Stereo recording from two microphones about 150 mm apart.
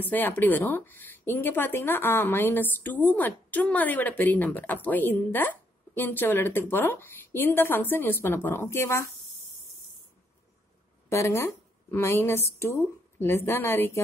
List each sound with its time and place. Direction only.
0.1 s a woman's voice: 10° left (ahead or behind)
11.1 s a woman's voice: 20° left (ahead or behind)